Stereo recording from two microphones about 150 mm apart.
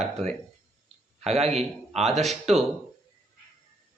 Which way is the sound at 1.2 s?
45° right (ahead or behind).